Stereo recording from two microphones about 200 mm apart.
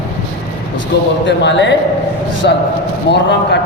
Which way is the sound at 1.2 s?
60° left (ahead or behind).